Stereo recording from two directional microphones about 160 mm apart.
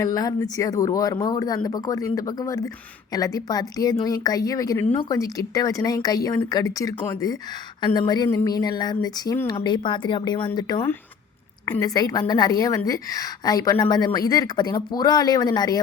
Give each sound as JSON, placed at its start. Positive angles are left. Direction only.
{"t": 0.0, "sound": "a woman's voice", "side_deg": 25}